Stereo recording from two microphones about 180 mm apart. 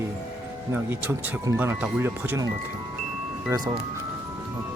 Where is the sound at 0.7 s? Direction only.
10° right (ahead or behind).